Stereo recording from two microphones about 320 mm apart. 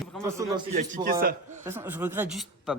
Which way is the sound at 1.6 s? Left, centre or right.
Centre.